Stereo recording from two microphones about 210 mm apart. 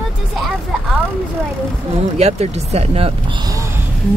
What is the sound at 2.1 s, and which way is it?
Speech, 30° right (ahead or behind).